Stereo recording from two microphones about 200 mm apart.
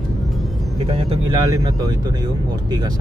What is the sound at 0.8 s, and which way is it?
Speech, 25° right (ahead or behind).